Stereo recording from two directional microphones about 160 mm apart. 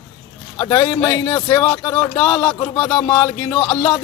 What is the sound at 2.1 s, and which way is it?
A man's voice, 10° left (ahead or behind).